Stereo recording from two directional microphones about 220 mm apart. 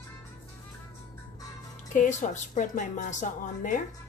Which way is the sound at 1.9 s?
35° left (ahead or behind).